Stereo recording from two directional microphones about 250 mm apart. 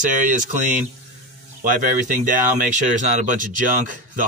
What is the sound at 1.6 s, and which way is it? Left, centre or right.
Speech, right.